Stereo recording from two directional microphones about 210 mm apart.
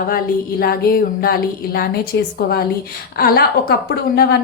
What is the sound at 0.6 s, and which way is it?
A woman's voice, 45° left (ahead or behind).